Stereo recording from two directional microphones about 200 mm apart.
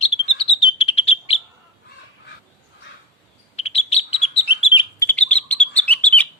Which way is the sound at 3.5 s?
30° left (ahead or behind).